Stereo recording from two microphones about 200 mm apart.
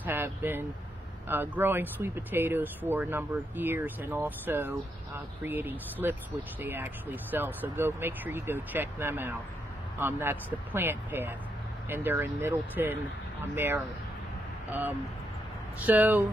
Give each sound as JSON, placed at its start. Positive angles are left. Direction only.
{"t": 0.0, "sound": "speech", "side_deg": -10}
{"t": 15.8, "sound": "speech", "side_deg": -10}